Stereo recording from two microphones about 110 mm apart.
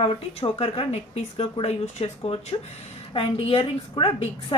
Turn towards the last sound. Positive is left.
turn(degrees=60)  # may be behind; listen again after turning